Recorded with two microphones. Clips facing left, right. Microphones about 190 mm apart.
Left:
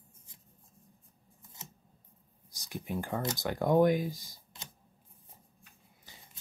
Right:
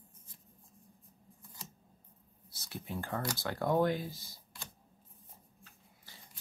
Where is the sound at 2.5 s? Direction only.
15° left (ahead or behind).